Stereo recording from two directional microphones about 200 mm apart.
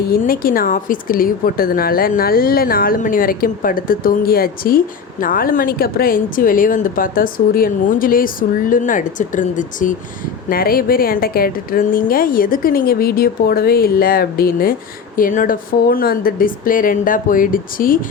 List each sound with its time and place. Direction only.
0.1 s a woman's voice: 45° left (ahead or behind)